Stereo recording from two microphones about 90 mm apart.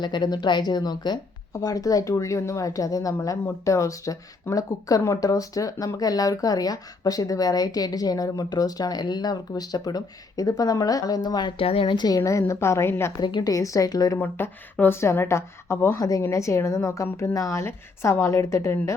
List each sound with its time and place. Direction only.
0.0 s speech: 50° left (ahead or behind)
11.5 s a woman's voice: 90° left; by 13.1 s 30° left (ahead or behind)
13.1 s speech: 50° left (ahead or behind)
13.5 s a woman's voice: 40° left (ahead or behind)
14.2 s a woman's voice: 25° left (ahead or behind)
16.0 s a woman's voice: 40° left (ahead or behind)